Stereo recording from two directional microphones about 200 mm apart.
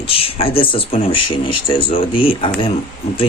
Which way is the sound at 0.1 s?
30° left (ahead or behind).